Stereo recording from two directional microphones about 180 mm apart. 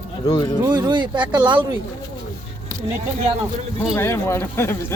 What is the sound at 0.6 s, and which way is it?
Speech, 25° right (ahead or behind).